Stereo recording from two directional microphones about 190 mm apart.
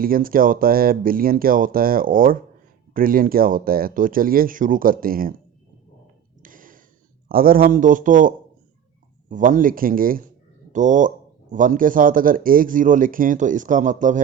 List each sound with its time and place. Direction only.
0.0 s speech: 50° right (ahead or behind)
6.4 s a sound: 45° right (ahead or behind)
7.3 s speech: 50° right (ahead or behind)
9.3 s speech: 45° right (ahead or behind)